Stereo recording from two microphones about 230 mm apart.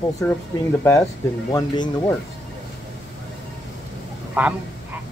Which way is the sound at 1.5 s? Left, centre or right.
Centre.